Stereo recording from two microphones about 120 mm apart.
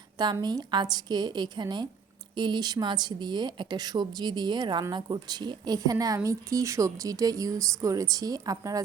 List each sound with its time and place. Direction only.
0.4 s a woman's voice: 35° right (ahead or behind)